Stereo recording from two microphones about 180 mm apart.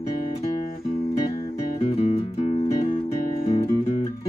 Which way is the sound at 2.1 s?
35° left (ahead or behind).